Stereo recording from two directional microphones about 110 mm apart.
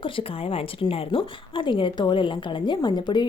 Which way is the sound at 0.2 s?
55° left (ahead or behind).